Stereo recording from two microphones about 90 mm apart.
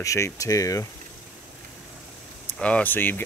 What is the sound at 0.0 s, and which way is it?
Speech, 35° left (ahead or behind).